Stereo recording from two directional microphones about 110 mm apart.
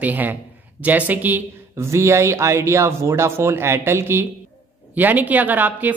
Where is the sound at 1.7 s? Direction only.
25° right (ahead or behind).